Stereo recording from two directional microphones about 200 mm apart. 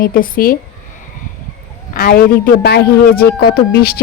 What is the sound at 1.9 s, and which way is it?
A man's voice, 45° left (ahead or behind).